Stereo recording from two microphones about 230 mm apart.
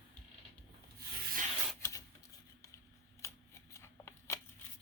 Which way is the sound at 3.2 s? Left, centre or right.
Centre.